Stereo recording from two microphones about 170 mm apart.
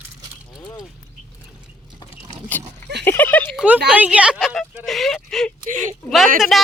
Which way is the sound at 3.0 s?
10° left (ahead or behind).